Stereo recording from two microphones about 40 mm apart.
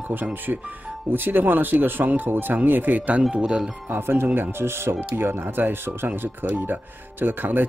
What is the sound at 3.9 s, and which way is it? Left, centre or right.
Speech, right.